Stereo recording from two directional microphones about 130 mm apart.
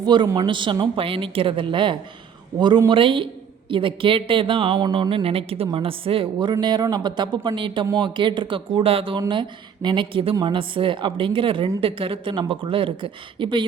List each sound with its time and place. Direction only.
0.0 s a woman's voice: 35° right (ahead or behind)